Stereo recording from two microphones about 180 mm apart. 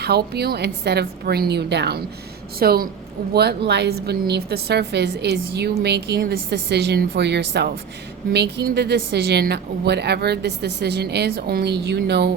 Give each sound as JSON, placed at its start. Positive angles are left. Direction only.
{"t": 0.0, "sound": "a woman's voice", "side_deg": -65}